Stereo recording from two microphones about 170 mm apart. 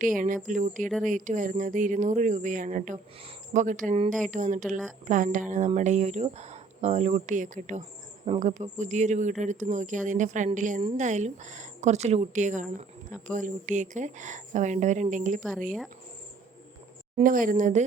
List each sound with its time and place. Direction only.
0.0 s speech: 50° right (ahead or behind)
15.4 s speech: centre (ahead or behind)
17.2 s speech: 55° right (ahead or behind)